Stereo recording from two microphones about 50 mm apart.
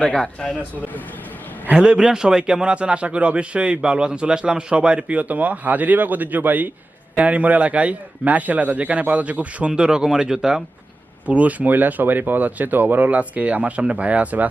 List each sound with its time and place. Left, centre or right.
0.0 s a man's voice: centre
1.7 s a man's voice: right
11.3 s speech: right